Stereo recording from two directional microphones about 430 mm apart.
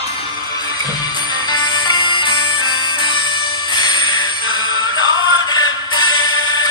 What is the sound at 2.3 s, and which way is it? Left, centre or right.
Music, left.